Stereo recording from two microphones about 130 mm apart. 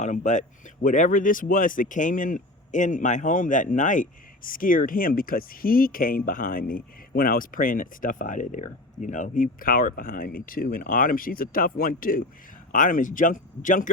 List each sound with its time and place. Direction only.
0.0 s speech: 70° left (ahead or behind)
0.9 s speech: 85° left